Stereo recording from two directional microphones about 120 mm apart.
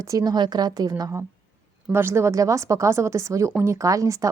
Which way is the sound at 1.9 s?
20° right (ahead or behind).